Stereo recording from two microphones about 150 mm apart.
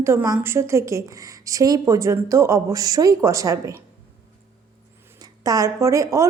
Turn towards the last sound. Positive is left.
turn(degrees=-20)  # may be behind; listen again after turning